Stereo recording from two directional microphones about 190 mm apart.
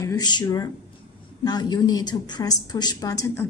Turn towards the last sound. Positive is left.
turn(degrees=15)  # may be behind; listen again after turning